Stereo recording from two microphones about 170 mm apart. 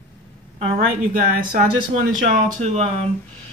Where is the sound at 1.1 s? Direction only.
55° right (ahead or behind).